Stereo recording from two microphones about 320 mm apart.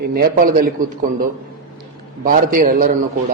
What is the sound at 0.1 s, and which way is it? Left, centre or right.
Speech, right.